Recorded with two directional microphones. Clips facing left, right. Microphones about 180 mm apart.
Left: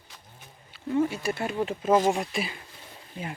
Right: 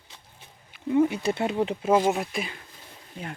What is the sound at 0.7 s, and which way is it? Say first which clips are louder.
Speech: right 4 dB; 15° right (ahead or behind).